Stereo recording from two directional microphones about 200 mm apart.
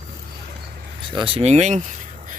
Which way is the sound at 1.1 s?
25° right (ahead or behind).